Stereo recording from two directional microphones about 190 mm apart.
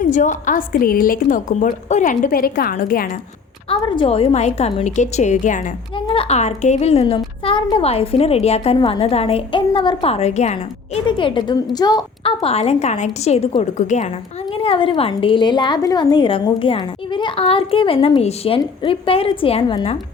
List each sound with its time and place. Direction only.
0.0 s a woman's voice: 40° left (ahead or behind)
3.7 s a woman's voice: 25° left (ahead or behind); by 5.7 s 40° left (ahead or behind)
6.1 s a woman's voice: 30° left (ahead or behind)
14.5 s a woman's voice: 30° left (ahead or behind)